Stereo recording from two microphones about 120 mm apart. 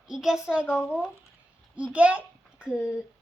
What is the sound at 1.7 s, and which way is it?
A child's voice, 10° right (ahead or behind).